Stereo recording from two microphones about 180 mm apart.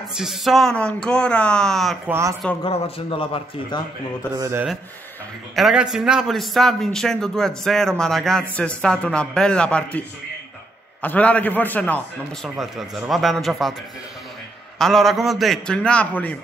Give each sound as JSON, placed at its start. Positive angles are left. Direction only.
{"t": 0.2, "sound": "a man's voice", "side_deg": 0}
{"t": 2.0, "sound": "speech", "side_deg": -15}
{"t": 2.6, "sound": "a man's voice", "side_deg": 30}
{"t": 4.4, "sound": "speech", "side_deg": -15}
{"t": 5.6, "sound": "a man's voice", "side_deg": -5}
{"t": 14.8, "sound": "a man's voice", "side_deg": 0}